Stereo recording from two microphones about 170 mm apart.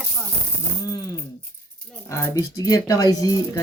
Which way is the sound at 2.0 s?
15° left (ahead or behind).